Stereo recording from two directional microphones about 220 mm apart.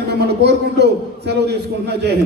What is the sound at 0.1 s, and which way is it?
A man's voice, 50° right (ahead or behind).